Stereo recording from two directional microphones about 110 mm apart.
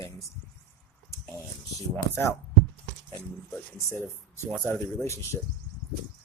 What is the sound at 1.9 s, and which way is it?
Speech, 20° left (ahead or behind).